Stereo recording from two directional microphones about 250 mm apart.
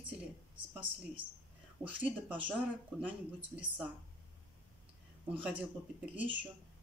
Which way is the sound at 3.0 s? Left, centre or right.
Centre.